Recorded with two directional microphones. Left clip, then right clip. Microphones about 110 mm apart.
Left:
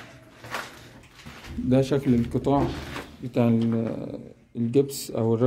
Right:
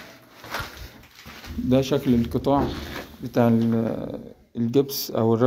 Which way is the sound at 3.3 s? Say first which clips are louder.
Right 3 dB; 15° left (ahead or behind).